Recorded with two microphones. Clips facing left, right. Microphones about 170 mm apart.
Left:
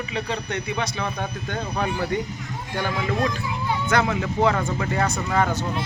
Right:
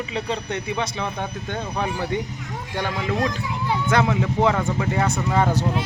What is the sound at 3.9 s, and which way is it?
Speech, 25° right (ahead or behind).